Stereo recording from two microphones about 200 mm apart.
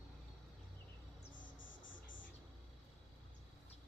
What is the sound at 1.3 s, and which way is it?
Music, 70° left (ahead or behind).